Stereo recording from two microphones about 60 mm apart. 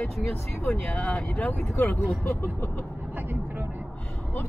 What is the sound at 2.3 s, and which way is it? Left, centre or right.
Vehicle, left.